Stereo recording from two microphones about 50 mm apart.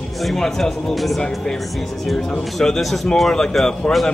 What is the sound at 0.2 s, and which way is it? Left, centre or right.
Speech, centre.